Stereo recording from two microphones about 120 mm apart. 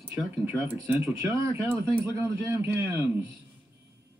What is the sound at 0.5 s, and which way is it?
Speech, 15° right (ahead or behind).